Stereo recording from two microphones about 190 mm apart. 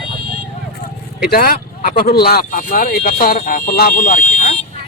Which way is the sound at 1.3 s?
50° left (ahead or behind).